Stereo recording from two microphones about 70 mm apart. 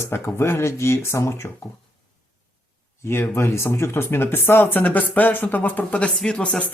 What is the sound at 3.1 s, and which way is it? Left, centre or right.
Speech, left.